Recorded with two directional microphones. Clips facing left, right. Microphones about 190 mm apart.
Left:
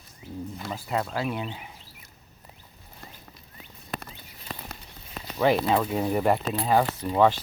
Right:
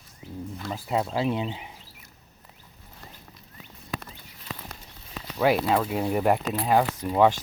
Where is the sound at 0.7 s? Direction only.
10° right (ahead or behind).